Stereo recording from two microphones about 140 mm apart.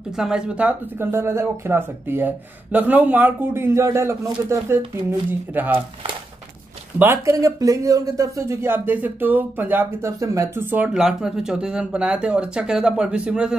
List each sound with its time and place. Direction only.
0.1 s speech: 5° right (ahead or behind)
7.0 s speech: 20° right (ahead or behind)